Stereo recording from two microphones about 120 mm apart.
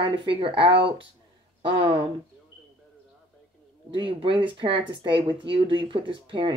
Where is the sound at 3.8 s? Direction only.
45° right (ahead or behind).